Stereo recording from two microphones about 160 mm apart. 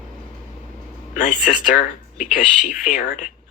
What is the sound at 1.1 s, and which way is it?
Speech, 50° left (ahead or behind).